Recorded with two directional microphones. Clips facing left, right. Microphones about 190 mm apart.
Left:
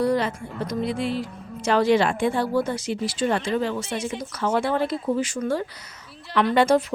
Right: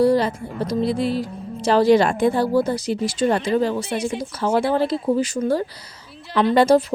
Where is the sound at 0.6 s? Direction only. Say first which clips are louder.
Right 5 dB; 35° right (ahead or behind).